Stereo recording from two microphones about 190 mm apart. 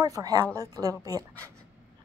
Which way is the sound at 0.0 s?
20° right (ahead or behind).